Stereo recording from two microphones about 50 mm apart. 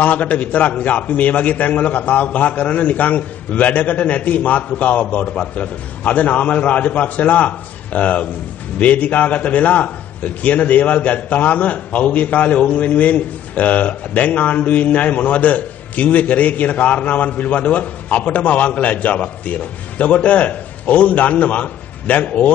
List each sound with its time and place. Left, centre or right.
0.0 s a man's voice: left